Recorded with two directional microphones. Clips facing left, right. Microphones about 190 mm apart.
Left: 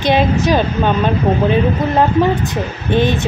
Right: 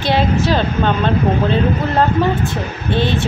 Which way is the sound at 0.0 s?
15° left (ahead or behind).